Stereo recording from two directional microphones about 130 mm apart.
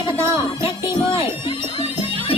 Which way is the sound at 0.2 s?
20° right (ahead or behind).